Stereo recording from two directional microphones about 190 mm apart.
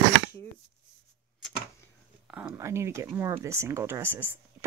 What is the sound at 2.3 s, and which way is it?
Speech, 10° right (ahead or behind).